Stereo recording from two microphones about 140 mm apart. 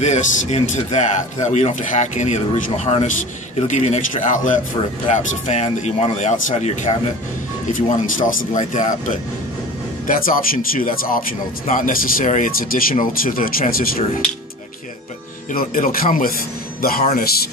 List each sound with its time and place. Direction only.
0.0 s speech: 55° left (ahead or behind)
7.7 s speech: 75° left (ahead or behind)
10.0 s speech: 90° left
15.5 s speech: 85° left